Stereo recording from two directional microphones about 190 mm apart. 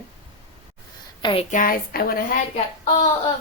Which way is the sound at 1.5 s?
45° left (ahead or behind).